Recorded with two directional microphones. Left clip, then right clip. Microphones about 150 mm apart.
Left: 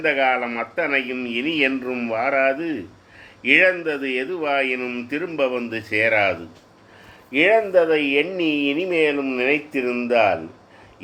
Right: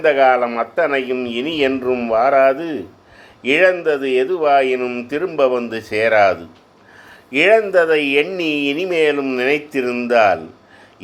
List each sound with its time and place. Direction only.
0.0 s speech: 30° right (ahead or behind)